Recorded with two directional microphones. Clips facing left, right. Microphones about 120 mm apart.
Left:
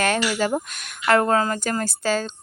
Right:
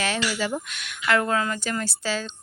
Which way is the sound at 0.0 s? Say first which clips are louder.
Left 5 dB; 50° left (ahead or behind).